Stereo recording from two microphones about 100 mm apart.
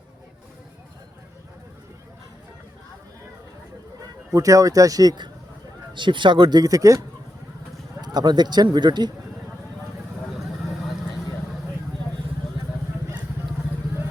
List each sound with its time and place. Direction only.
4.3 s speech: 35° right (ahead or behind)
8.0 s speech: 45° right (ahead or behind)